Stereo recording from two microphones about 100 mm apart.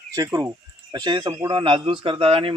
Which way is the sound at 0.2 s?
35° right (ahead or behind).